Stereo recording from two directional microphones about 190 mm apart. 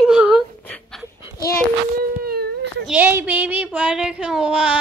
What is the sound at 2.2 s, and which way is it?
Whimper, 55° right (ahead or behind).